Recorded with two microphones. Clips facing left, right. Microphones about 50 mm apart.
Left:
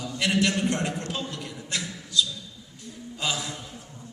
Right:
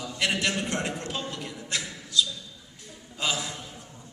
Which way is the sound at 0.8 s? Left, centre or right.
Centre.